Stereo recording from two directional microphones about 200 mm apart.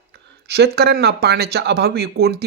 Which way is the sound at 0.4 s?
55° right (ahead or behind).